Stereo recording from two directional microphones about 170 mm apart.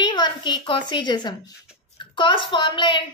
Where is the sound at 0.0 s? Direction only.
25° left (ahead or behind).